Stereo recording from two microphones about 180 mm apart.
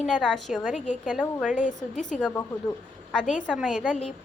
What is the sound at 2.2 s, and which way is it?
Speech, 15° left (ahead or behind).